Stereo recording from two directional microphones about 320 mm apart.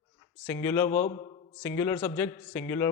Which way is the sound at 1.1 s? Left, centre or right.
Centre.